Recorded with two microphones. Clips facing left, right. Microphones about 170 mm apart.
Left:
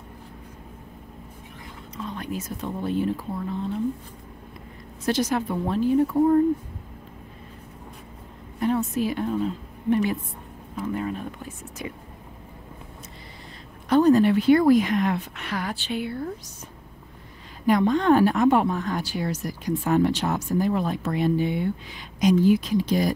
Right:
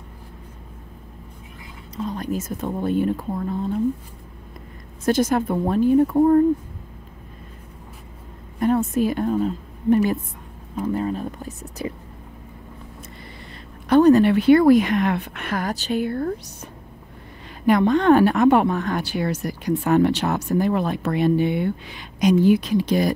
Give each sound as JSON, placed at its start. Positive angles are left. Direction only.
{"t": 2.0, "sound": "a woman's voice", "side_deg": -40}
{"t": 5.0, "sound": "a woman's voice", "side_deg": -50}
{"t": 8.5, "sound": "a woman's voice", "side_deg": -50}
{"t": 13.8, "sound": "a woman's voice", "side_deg": -65}
{"t": 17.6, "sound": "a woman's voice", "side_deg": -65}